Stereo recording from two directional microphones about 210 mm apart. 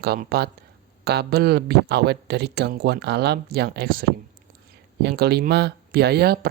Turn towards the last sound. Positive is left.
turn(degrees=-50)  # may be behind; listen again after turning